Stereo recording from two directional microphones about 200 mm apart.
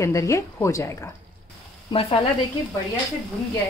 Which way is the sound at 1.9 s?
30° left (ahead or behind).